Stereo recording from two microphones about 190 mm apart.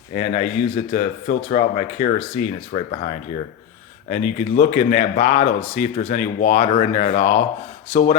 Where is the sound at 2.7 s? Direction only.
35° left (ahead or behind).